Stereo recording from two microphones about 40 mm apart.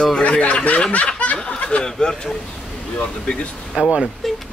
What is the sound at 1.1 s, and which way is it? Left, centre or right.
Snicker, left.